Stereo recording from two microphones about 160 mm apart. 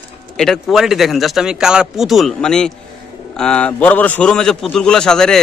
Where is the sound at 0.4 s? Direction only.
Centre (ahead or behind).